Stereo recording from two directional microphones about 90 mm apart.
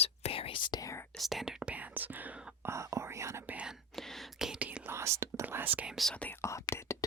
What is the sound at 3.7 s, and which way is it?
Whispering, 5° left (ahead or behind).